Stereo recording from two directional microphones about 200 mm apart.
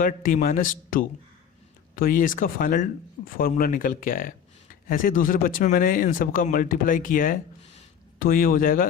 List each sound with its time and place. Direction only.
0.0 s speech: 45° left (ahead or behind)